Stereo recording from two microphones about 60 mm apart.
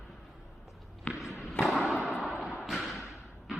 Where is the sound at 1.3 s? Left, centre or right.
Centre.